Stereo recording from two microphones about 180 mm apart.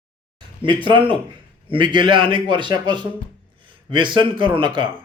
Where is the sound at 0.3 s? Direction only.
25° right (ahead or behind).